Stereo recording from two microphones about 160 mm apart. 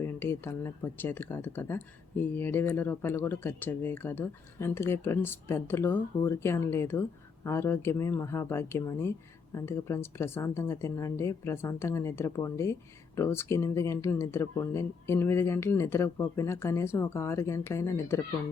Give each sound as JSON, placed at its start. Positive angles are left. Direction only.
{"t": 0.0, "sound": "speech", "side_deg": 15}